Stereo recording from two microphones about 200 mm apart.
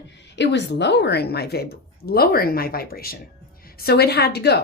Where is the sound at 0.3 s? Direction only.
60° left (ahead or behind).